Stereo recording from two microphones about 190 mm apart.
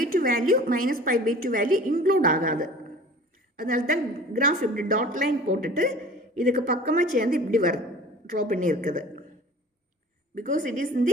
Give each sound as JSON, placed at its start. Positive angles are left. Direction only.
{"t": 0.0, "sound": "a woman's voice", "side_deg": -50}
{"t": 10.3, "sound": "a woman's voice", "side_deg": -45}